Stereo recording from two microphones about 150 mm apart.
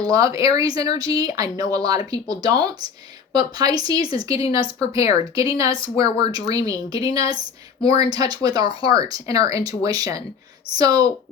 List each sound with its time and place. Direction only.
0.1 s speech: 25° right (ahead or behind)